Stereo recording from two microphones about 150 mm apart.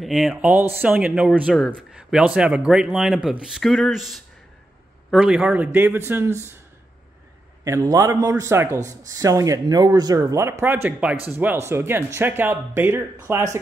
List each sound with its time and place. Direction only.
0.0 s speech: centre (ahead or behind)
7.6 s a man's voice: 20° right (ahead or behind)